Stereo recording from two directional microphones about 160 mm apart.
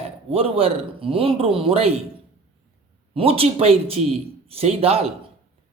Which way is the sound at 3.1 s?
35° right (ahead or behind).